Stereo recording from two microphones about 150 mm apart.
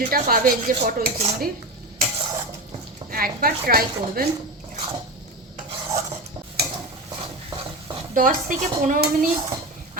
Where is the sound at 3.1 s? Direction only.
75° right (ahead or behind).